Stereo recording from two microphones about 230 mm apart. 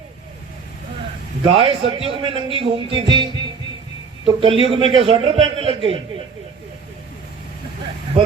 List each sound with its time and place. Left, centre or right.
1.5 s speech: right
4.4 s speech: right